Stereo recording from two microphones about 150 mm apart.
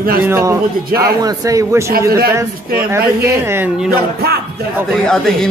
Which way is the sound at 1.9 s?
90° right.